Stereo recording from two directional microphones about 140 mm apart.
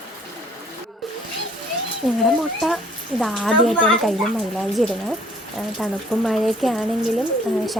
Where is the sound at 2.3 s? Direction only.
Centre (ahead or behind).